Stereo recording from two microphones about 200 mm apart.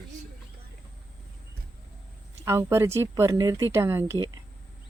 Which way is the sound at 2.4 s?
15° right (ahead or behind).